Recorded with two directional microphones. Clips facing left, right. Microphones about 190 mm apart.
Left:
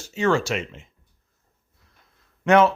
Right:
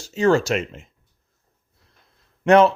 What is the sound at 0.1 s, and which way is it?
Speech, 40° right (ahead or behind).